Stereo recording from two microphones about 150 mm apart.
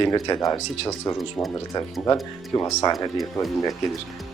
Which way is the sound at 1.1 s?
Centre (ahead or behind).